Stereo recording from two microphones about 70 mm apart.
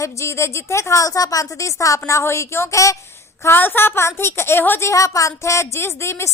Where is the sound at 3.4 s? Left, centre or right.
Left.